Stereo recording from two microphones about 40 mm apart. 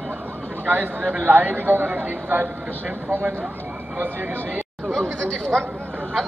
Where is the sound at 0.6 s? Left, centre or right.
Right.